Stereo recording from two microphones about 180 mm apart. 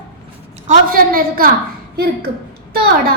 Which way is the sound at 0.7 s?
55° right (ahead or behind).